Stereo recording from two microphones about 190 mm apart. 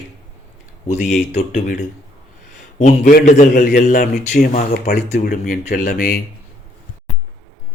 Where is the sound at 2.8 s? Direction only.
35° left (ahead or behind).